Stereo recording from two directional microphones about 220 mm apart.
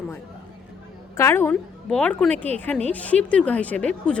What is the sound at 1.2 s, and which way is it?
A woman's voice, 10° left (ahead or behind).